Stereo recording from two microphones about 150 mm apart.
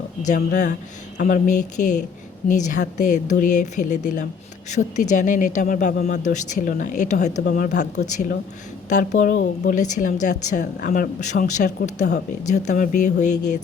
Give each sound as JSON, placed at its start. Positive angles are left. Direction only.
{"t": 0.3, "sound": "speech", "side_deg": 55}
{"t": 7.4, "sound": "speech", "side_deg": 65}
{"t": 10.8, "sound": "speech", "side_deg": 75}